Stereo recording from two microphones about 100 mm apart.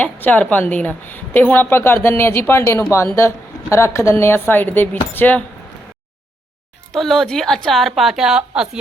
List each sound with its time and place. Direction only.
0.0 s a woman's voice: 15° left (ahead or behind)
6.9 s a woman's voice: 5° left (ahead or behind)